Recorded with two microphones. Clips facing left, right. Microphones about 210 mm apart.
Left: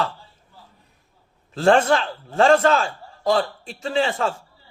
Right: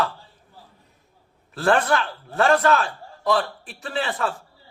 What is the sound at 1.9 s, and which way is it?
Speech, 30° left (ahead or behind).